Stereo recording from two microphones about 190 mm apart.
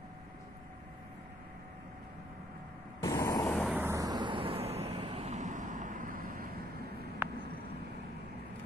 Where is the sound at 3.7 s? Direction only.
15° right (ahead or behind).